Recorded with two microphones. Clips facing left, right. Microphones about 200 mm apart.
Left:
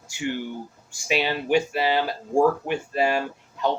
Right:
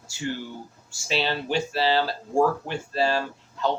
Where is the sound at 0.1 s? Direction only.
15° left (ahead or behind).